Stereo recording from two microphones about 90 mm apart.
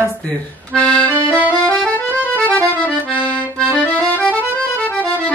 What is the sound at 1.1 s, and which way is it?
Accordion, 20° right (ahead or behind).